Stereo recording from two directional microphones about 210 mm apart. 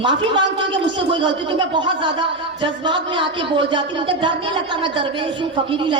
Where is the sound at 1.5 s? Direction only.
20° right (ahead or behind).